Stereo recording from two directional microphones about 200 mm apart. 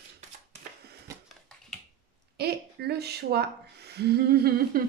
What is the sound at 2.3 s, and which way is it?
Speech, 55° right (ahead or behind).